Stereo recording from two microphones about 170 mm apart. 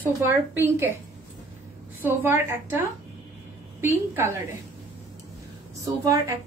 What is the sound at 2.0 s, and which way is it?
Speech, 15° right (ahead or behind).